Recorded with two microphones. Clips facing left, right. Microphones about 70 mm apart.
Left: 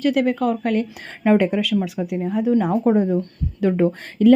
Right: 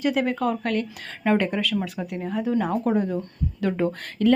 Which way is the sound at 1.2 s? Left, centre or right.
Centre.